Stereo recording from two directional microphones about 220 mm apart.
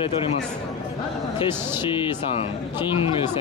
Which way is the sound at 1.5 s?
10° right (ahead or behind).